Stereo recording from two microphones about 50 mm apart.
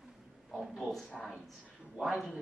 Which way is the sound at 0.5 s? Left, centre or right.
Centre.